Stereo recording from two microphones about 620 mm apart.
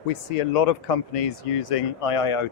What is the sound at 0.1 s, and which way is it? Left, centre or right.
Speech, left.